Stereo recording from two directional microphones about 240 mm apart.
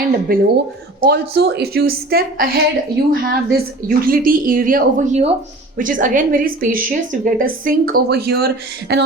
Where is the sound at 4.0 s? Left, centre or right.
Right.